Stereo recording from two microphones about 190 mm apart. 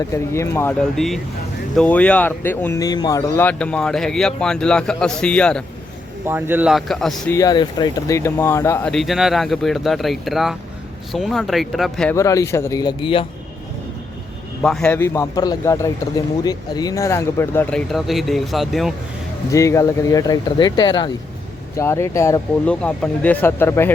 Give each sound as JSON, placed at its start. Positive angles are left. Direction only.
{"t": 0.1, "sound": "a man's voice", "side_deg": 15}
{"t": 0.9, "sound": "speech", "side_deg": 0}
{"t": 6.2, "sound": "speech", "side_deg": -10}
{"t": 7.3, "sound": "a man's voice", "side_deg": 20}
{"t": 8.9, "sound": "speech", "side_deg": 0}
{"t": 12.1, "sound": "a man's voice", "side_deg": 15}
{"t": 14.6, "sound": "a man's voice", "side_deg": 5}
{"t": 19.5, "sound": "a man's voice", "side_deg": 15}